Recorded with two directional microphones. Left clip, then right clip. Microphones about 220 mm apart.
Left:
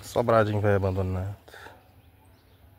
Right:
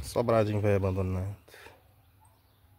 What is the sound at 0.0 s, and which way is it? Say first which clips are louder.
Speech: left 4 dB; 5° right (ahead or behind).